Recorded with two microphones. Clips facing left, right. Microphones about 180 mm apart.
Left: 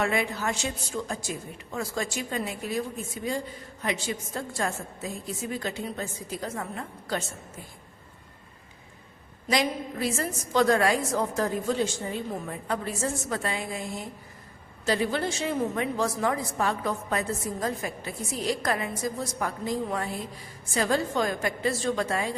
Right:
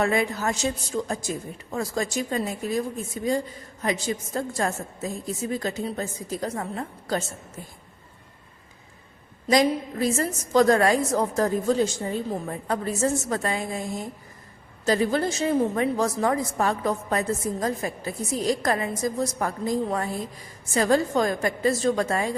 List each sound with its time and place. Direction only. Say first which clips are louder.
0.0 s a woman's voice: right 4 dB; 40° right (ahead or behind)
9.5 s a woman's voice: right 6 dB; 40° right (ahead or behind)